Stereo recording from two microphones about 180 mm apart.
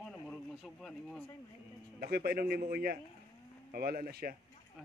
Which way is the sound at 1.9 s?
55° right (ahead or behind).